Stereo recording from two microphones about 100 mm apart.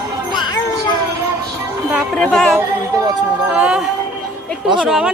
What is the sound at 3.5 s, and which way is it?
Speech, 10° right (ahead or behind).